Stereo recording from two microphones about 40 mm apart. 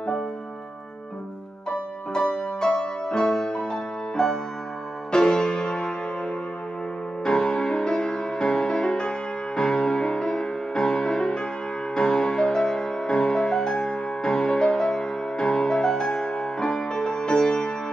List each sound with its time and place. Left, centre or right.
2.3 s music: centre
7.2 s music: centre